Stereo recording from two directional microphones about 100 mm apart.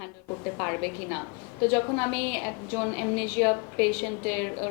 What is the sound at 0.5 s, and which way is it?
A woman's voice, 20° left (ahead or behind).